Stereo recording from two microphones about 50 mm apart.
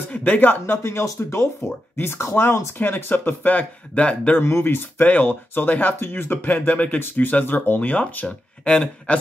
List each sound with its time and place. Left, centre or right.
0.1 s speech: left
0.7 s speech: left
2.0 s speech: left
4.4 s speech: left
5.0 s speech: left
5.9 s speech: left
6.5 s speech: left
8.6 s speech: left